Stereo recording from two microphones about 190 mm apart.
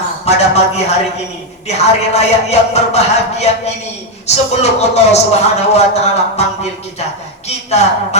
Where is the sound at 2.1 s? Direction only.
35° left (ahead or behind).